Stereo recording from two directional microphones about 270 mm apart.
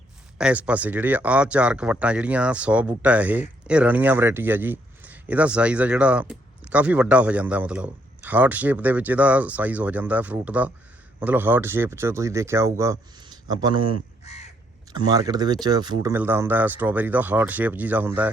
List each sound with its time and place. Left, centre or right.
0.3 s speech: centre
14.3 s crow: left
14.9 s speech: centre